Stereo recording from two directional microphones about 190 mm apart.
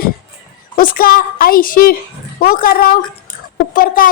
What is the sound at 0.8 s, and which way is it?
Speech, 50° left (ahead or behind).